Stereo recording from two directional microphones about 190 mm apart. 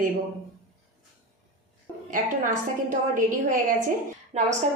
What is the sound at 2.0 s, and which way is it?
A woman's voice, 40° right (ahead or behind).